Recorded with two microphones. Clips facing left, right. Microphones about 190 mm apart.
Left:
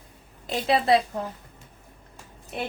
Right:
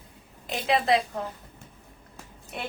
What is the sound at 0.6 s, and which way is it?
Speech, 35° left (ahead or behind).